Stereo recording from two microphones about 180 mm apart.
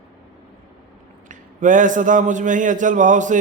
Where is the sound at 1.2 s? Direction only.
45° right (ahead or behind).